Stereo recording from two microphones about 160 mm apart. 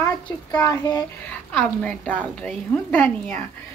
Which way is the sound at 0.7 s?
25° left (ahead or behind).